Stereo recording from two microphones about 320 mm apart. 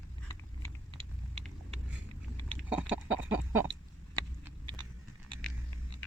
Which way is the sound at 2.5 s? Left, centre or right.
Centre.